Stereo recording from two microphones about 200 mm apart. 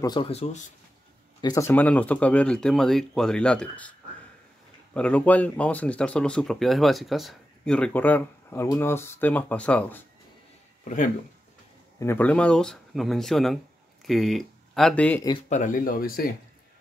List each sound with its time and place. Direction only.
0.0 s speech: 25° left (ahead or behind)
1.4 s speech: 15° left (ahead or behind)
4.9 s speech: 5° left (ahead or behind)
10.8 s speech: 40° left (ahead or behind)
12.0 s speech: 10° left (ahead or behind)
15.5 s speech: 40° left (ahead or behind)